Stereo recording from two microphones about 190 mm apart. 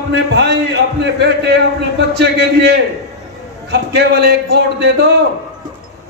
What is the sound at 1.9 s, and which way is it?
Speech, 65° right (ahead or behind).